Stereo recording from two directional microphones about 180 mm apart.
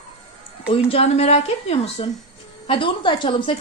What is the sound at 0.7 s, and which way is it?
A woman's voice, 35° left (ahead or behind).